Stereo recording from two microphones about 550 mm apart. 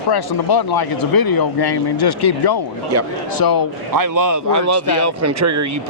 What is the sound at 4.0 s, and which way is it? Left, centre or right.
Speech, right.